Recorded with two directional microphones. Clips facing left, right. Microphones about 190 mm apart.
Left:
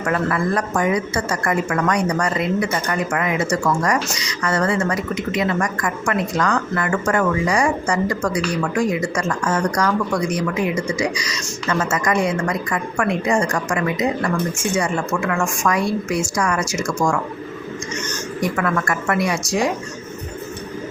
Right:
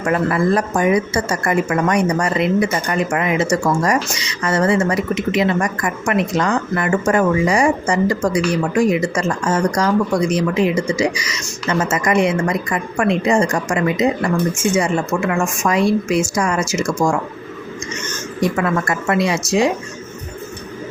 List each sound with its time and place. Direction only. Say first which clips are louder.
0.0 s a woman's voice: right 3 dB; 20° right (ahead or behind)
18.5 s a woman's voice: right 2 dB; 20° right (ahead or behind)